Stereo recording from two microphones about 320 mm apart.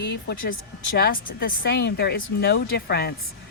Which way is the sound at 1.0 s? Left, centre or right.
Left.